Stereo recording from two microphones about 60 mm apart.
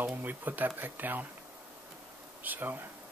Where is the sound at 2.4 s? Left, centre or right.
Right.